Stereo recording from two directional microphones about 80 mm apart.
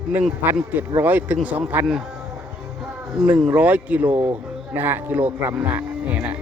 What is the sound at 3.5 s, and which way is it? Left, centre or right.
Speech, right.